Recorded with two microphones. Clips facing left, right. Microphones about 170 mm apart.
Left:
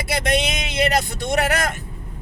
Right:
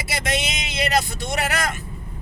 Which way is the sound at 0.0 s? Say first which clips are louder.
Left 5 dB; 55° left (ahead or behind).